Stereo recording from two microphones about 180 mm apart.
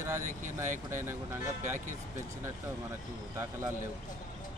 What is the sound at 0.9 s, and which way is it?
Speech, 15° right (ahead or behind).